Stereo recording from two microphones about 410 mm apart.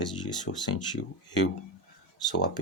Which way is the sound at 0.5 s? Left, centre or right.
Left.